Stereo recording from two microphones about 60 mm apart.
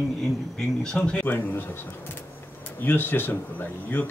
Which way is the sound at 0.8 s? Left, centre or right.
Centre.